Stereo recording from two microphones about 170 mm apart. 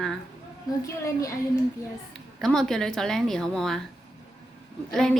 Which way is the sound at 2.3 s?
5° left (ahead or behind).